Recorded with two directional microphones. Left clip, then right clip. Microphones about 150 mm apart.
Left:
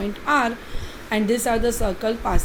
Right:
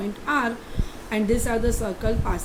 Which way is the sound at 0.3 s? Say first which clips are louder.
Left 4 dB; 20° left (ahead or behind).